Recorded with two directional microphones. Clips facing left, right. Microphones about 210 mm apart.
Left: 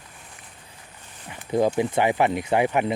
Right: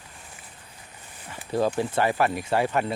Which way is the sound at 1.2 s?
20° left (ahead or behind).